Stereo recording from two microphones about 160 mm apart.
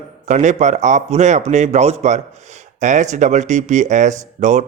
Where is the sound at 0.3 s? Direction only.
45° right (ahead or behind).